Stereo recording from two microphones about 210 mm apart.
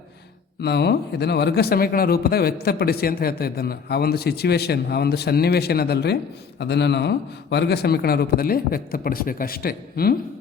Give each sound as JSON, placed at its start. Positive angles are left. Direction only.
{"t": 0.6, "sound": "speech", "side_deg": 50}